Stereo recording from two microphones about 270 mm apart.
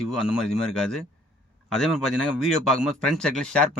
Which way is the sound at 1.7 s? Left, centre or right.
Centre.